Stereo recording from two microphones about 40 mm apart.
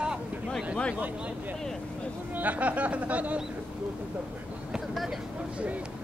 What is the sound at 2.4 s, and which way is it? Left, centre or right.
Speech, right.